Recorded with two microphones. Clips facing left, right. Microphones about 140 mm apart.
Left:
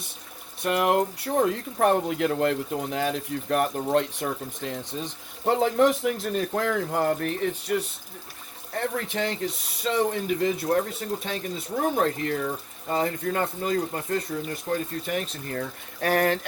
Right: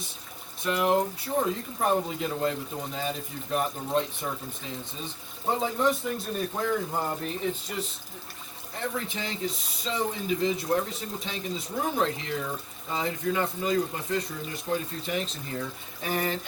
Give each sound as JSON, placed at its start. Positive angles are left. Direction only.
{"t": 0.6, "sound": "speech", "side_deg": 65}
{"t": 8.8, "sound": "speech", "side_deg": 60}